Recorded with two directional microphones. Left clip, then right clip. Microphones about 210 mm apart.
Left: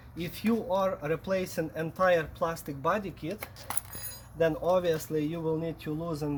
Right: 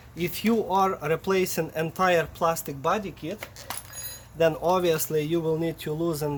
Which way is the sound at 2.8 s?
10° right (ahead or behind).